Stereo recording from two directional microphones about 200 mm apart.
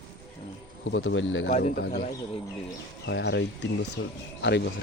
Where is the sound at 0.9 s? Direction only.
70° left (ahead or behind).